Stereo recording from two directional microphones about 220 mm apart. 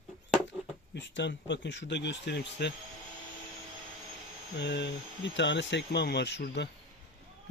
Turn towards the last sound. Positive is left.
turn(degrees=50)  # may be behind; listen again after turning